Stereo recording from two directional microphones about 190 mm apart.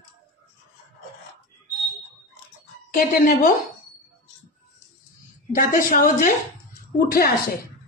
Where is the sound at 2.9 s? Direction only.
50° left (ahead or behind).